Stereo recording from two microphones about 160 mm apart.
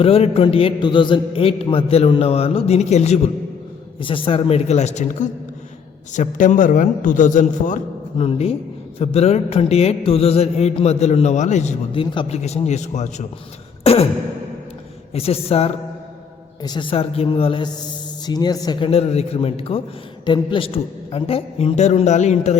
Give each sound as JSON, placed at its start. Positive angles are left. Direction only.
{"t": 0.0, "sound": "a woman's voice", "side_deg": 35}
{"t": 8.2, "sound": "a woman's voice", "side_deg": 40}
{"t": 13.8, "sound": "beatboxing", "side_deg": 40}
{"t": 15.1, "sound": "a woman's voice", "side_deg": 40}
{"t": 16.6, "sound": "a woman's voice", "side_deg": 30}
{"t": 18.9, "sound": "a woman's voice", "side_deg": 40}